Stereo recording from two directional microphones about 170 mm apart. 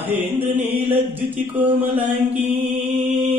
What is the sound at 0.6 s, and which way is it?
Mantra, 35° right (ahead or behind).